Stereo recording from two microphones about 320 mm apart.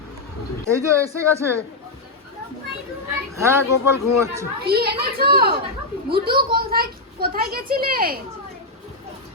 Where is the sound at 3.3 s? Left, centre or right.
Centre.